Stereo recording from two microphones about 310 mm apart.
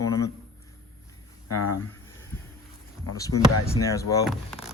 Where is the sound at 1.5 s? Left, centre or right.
Left.